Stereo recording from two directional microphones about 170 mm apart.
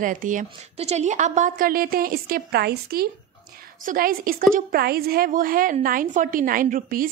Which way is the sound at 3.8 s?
55° right (ahead or behind).